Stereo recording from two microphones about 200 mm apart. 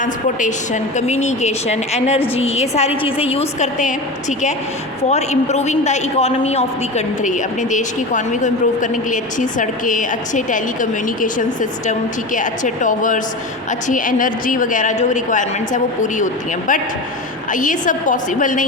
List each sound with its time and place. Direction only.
0.0 s a man's voice: 40° left (ahead or behind)